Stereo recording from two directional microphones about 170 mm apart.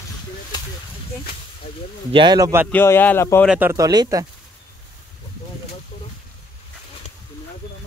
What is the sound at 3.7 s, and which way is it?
Speech, 20° right (ahead or behind).